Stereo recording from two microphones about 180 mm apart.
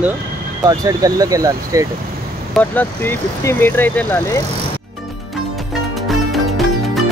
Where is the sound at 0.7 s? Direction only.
20° right (ahead or behind).